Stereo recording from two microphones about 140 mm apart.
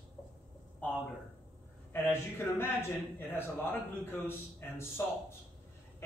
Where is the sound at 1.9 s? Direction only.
15° left (ahead or behind).